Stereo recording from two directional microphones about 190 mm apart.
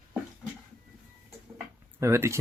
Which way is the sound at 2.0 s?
15° right (ahead or behind).